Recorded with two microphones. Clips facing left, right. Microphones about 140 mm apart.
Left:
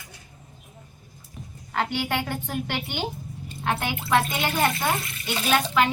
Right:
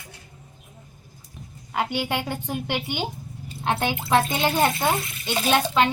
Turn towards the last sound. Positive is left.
turn(degrees=-25)  # may be behind; listen again after turning